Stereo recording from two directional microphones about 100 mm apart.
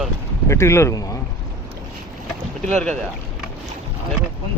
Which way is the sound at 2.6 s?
10° left (ahead or behind).